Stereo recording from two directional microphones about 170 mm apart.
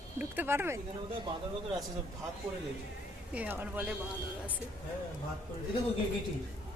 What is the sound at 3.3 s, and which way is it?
Speech, 10° right (ahead or behind).